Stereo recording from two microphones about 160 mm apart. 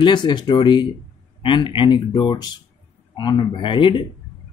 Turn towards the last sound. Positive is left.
turn(degrees=30)  # may be behind; listen again after turning